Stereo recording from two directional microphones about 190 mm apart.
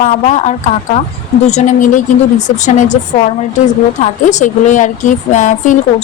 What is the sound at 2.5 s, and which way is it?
A woman's voice, 40° left (ahead or behind).